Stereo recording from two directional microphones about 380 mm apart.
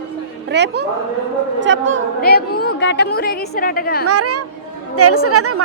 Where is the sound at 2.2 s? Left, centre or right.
Left.